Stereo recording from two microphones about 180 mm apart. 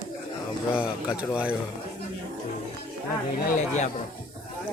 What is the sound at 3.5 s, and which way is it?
Speech, 40° left (ahead or behind).